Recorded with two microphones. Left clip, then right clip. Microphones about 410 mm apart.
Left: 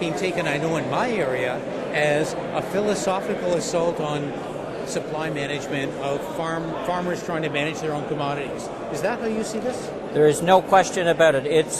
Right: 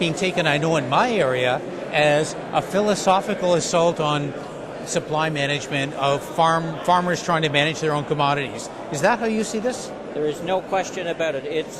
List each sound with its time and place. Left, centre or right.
0.0 s speech: right
10.2 s speech: left